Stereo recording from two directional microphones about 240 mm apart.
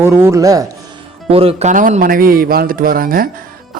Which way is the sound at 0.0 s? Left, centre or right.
Centre.